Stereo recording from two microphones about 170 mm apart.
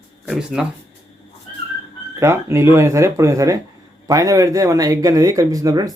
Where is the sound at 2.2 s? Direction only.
15° right (ahead or behind).